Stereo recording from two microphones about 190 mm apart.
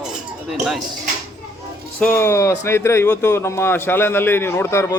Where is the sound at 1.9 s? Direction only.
10° left (ahead or behind).